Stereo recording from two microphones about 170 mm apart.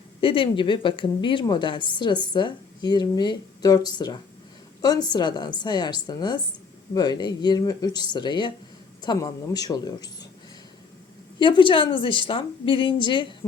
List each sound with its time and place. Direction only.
0.2 s a woman's voice: 30° left (ahead or behind)
11.3 s a woman's voice: 30° left (ahead or behind)